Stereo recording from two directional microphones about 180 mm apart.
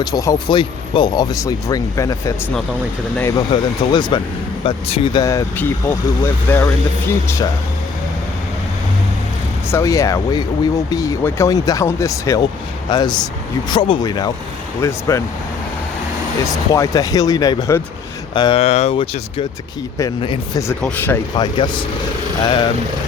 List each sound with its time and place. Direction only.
0.0 s speech: 20° left (ahead or behind)
5.2 s speech: 15° left (ahead or behind)
9.6 s speech: 15° left (ahead or behind)
16.5 s speech: 20° left (ahead or behind)
18.6 s speech: 35° left (ahead or behind)
20.8 s speech: 10° left (ahead or behind)
21.3 s speech: 25° left (ahead or behind)